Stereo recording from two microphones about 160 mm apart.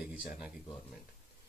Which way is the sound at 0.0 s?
5° right (ahead or behind).